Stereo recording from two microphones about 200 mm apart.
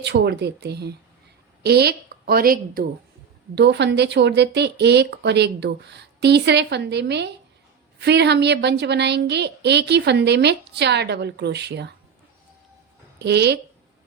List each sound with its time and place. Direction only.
0.0 s a woman's voice: 60° right (ahead or behind)
3.5 s a woman's voice: 60° right (ahead or behind)
13.1 s a woman's voice: 55° right (ahead or behind)